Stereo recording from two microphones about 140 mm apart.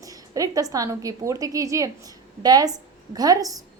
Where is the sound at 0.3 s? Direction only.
25° right (ahead or behind).